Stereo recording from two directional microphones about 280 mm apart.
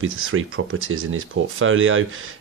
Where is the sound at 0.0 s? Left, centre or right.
Right.